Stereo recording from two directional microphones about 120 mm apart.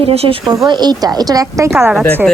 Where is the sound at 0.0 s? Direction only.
55° right (ahead or behind).